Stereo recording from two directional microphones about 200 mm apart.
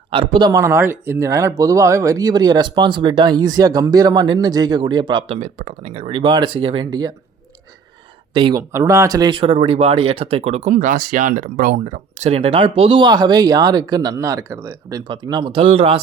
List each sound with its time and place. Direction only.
0.1 s speech: 25° right (ahead or behind)
8.3 s speech: 25° right (ahead or behind)